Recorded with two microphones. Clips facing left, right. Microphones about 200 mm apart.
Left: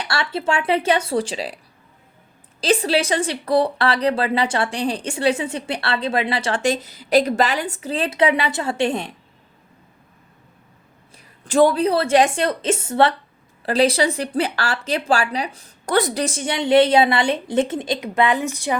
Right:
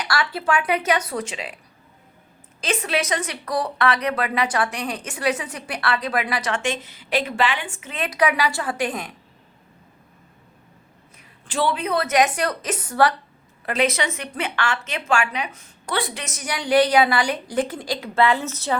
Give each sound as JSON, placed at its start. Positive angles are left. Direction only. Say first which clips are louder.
{"t": 0.0, "sound": "speech", "louder": "left 1 dB", "side_deg": 25}
{"t": 2.6, "sound": "speech", "louder": "left 6 dB", "side_deg": 35}
{"t": 11.4, "sound": "speech", "louder": "left 8 dB", "side_deg": 45}